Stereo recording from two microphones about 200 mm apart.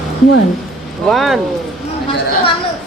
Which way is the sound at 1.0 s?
Centre (ahead or behind).